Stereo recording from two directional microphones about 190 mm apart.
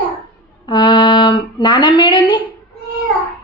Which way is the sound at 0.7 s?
20° left (ahead or behind).